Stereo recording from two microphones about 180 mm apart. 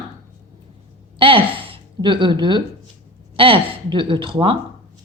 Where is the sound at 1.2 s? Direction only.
30° right (ahead or behind).